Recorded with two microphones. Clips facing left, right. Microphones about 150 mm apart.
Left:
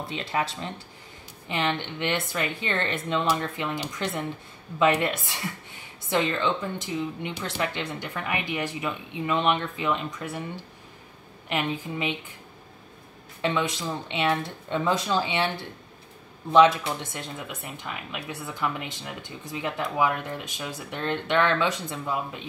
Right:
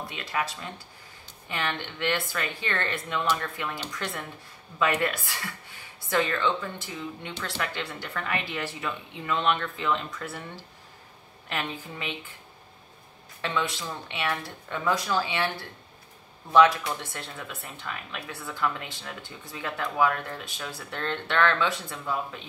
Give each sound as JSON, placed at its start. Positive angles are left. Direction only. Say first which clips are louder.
{"t": 0.1, "sound": "speech", "louder": "left 4 dB", "side_deg": 25}
{"t": 13.4, "sound": "speech", "louder": "left 3 dB", "side_deg": 20}
{"t": 16.5, "sound": "speech", "louder": "left 2 dB", "side_deg": 20}